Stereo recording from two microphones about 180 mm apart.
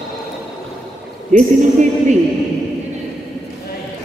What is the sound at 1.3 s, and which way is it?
Speech, 40° right (ahead or behind).